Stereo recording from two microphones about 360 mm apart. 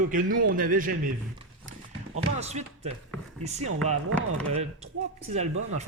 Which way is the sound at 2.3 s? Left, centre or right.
Centre.